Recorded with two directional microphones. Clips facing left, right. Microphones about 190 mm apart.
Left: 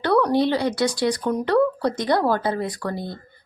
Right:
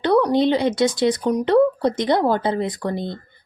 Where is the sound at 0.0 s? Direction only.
15° right (ahead or behind).